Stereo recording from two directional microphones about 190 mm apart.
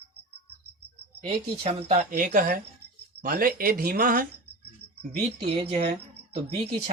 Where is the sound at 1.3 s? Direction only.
30° right (ahead or behind); by 4.3 s 50° right (ahead or behind).